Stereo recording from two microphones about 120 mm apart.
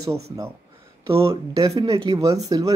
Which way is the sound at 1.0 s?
50° right (ahead or behind).